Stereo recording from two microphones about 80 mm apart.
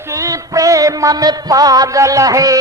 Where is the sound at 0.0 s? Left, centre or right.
Right.